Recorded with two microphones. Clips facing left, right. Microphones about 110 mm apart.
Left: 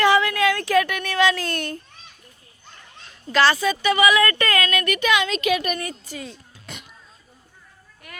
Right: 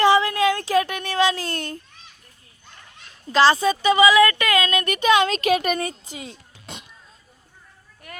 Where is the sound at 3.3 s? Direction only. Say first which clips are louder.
Right 2 dB; 30° right (ahead or behind).